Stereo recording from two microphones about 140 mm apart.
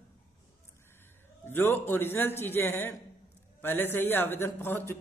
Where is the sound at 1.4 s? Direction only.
15° left (ahead or behind).